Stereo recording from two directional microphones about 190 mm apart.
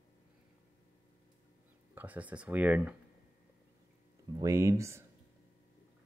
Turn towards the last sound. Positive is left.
turn(degrees=-15)  # may be behind; listen again after turning